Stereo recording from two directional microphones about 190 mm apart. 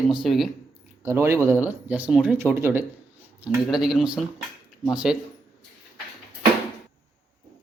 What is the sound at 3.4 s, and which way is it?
A man's voice, centre (ahead or behind).